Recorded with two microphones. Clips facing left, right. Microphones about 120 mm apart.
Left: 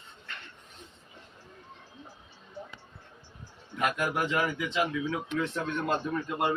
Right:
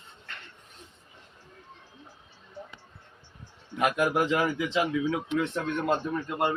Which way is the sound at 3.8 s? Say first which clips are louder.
Right 4 dB; 25° right (ahead or behind).